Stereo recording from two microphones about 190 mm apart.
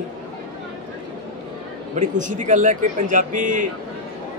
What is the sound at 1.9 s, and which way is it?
Speech, 40° right (ahead or behind).